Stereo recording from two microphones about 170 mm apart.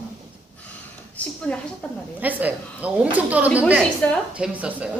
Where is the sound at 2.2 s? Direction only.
10° right (ahead or behind).